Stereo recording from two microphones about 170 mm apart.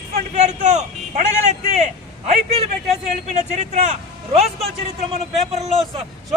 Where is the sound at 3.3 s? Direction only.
45° right (ahead or behind).